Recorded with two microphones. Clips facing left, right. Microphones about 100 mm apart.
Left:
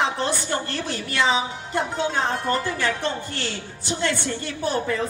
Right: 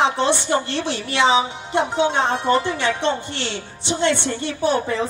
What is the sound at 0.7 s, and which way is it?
A woman's voice, 80° right.